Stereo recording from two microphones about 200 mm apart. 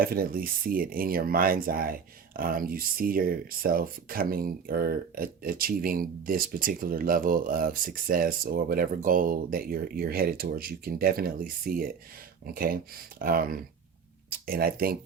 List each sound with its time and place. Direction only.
0.0 s speech: 45° right (ahead or behind)